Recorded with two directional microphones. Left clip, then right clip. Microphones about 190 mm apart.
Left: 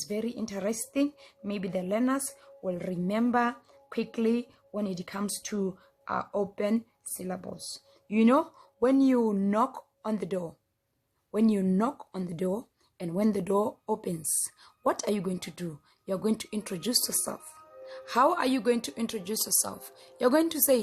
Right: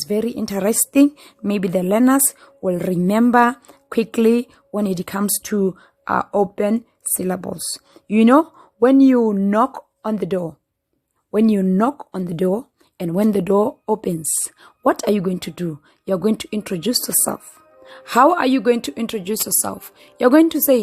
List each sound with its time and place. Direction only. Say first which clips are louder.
0.0 s a woman's voice: right 12 dB; 45° right (ahead or behind)
11.6 s speech: right 11 dB; 25° right (ahead or behind)